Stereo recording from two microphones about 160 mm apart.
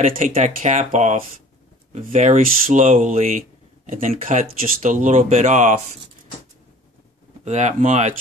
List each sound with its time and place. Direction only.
0.0 s speech: 60° right (ahead or behind)
0.3 s speech: 50° right (ahead or behind)
7.4 s speech: 45° right (ahead or behind)